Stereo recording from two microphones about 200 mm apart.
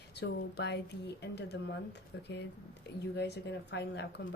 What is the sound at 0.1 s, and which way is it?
A woman's voice, 55° left (ahead or behind).